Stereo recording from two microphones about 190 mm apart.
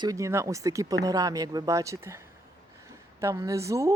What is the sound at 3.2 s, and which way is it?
Speech, 15° right (ahead or behind).